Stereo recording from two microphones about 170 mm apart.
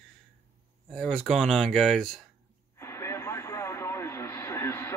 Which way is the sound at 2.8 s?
15° left (ahead or behind).